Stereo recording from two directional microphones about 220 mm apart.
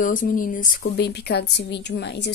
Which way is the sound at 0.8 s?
50° left (ahead or behind).